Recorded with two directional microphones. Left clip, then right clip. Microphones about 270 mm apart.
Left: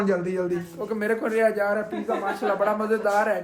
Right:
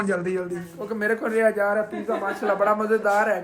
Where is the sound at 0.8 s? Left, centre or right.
Centre.